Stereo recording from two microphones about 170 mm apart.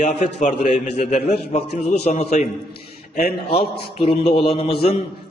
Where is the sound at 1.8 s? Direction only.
40° left (ahead or behind).